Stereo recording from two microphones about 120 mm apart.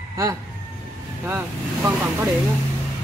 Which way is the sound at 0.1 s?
25° right (ahead or behind).